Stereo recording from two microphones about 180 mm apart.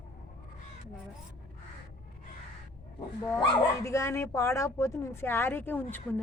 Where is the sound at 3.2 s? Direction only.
15° left (ahead or behind).